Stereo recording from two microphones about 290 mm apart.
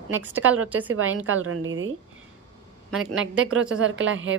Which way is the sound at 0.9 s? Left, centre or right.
Right.